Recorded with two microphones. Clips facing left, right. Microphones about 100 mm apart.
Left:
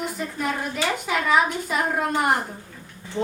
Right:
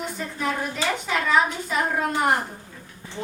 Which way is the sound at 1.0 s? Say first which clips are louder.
Left 1 dB; 5° left (ahead or behind).